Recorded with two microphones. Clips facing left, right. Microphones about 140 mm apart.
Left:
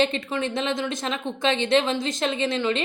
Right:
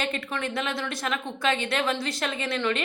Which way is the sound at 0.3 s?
20° left (ahead or behind).